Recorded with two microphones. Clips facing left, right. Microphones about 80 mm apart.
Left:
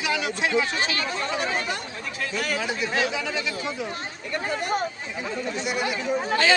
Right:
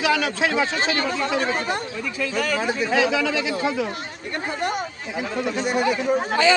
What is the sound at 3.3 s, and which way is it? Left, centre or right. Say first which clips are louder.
Speech: right 6 dB; right.